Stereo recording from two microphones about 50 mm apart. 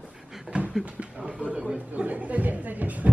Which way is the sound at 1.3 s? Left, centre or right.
Right.